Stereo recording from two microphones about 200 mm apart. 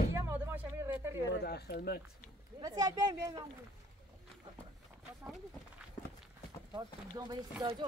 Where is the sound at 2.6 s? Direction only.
20° right (ahead or behind).